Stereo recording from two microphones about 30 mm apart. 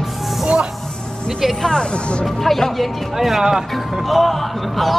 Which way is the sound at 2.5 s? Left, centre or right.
Centre.